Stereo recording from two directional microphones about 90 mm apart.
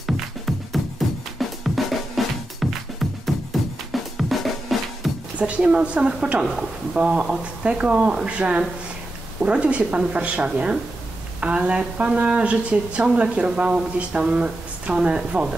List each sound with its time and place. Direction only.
0.5 s music: centre (ahead or behind)
5.4 s speech: 10° right (ahead or behind)